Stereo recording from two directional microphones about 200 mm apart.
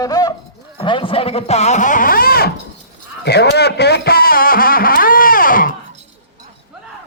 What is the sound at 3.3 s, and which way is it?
Music, 55° left (ahead or behind).